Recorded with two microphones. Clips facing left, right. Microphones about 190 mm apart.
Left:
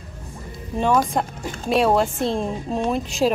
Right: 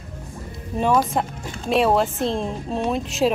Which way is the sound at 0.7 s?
5° right (ahead or behind).